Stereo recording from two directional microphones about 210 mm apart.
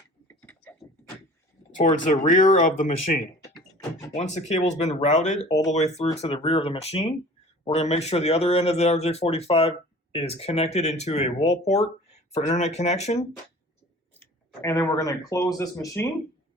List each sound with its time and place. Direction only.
2.0 s speech: 35° left (ahead or behind)
4.1 s speech: 35° left (ahead or behind)
5.5 s speech: 15° left (ahead or behind)
5.7 s speech: 30° left (ahead or behind)
14.8 s speech: 15° left (ahead or behind)